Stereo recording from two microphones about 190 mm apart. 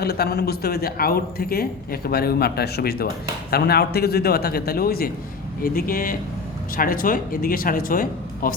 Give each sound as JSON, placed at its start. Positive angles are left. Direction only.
{"t": 0.0, "sound": "speech", "side_deg": 55}